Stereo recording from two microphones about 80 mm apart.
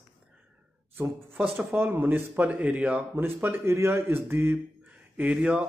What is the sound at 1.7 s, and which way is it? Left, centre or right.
Speech, right.